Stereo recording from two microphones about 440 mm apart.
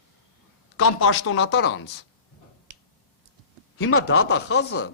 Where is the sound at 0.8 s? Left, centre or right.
Left.